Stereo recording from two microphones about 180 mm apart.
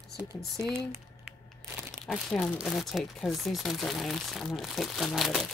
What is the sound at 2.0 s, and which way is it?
Speech, centre (ahead or behind).